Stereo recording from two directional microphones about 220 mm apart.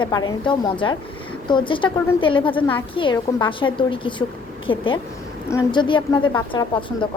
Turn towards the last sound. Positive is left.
turn(degrees=20)  # may be behind; listen again after turning